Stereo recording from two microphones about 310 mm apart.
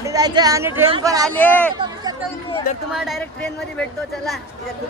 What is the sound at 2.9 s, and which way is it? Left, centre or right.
Speech, centre.